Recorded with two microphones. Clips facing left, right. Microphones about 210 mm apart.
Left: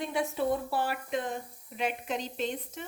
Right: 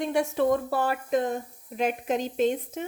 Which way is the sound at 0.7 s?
45° right (ahead or behind).